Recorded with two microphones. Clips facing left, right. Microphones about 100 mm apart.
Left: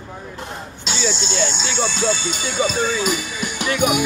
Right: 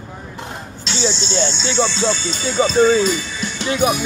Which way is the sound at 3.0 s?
10° left (ahead or behind).